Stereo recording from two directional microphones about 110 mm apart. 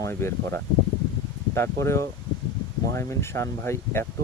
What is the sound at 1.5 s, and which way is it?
Speech, 25° left (ahead or behind).